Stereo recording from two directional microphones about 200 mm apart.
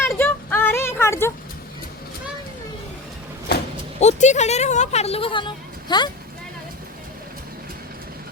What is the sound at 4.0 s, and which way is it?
Speech, 35° left (ahead or behind).